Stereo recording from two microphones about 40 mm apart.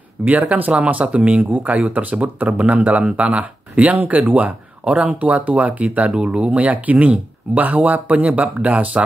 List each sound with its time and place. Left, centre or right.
0.2 s speech: right